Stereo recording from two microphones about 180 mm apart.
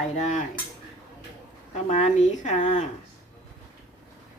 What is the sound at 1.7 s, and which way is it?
Speech, 40° left (ahead or behind).